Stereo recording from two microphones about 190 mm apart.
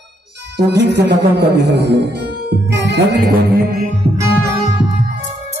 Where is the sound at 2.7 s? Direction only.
65° right (ahead or behind).